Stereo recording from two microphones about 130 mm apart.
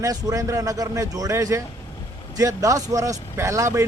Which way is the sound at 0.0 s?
25° right (ahead or behind).